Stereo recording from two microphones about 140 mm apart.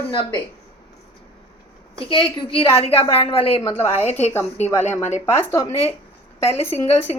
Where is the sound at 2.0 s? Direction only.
35° left (ahead or behind).